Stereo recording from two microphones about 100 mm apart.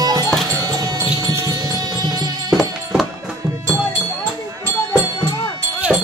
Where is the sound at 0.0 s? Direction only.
40° right (ahead or behind).